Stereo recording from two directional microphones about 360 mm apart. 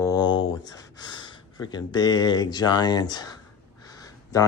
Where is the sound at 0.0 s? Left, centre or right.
Centre.